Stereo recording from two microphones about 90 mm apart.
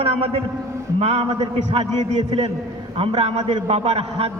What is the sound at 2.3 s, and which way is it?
A man's voice, 90° right.